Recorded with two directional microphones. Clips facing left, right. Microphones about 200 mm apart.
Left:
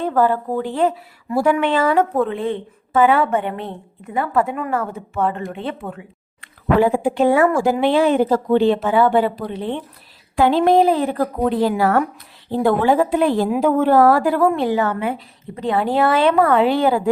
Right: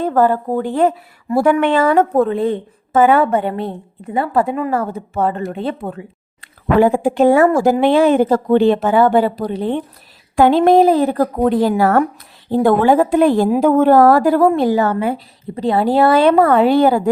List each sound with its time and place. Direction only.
0.0 s a woman's voice: 45° right (ahead or behind)
6.7 s a woman's voice: 45° right (ahead or behind)